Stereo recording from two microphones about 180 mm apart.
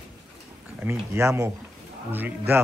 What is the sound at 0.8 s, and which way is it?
Speech, 15° right (ahead or behind).